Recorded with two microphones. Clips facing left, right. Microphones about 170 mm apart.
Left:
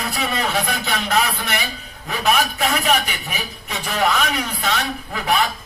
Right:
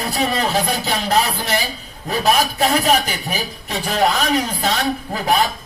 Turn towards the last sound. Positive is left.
turn(degrees=-40)  # may be behind; listen again after turning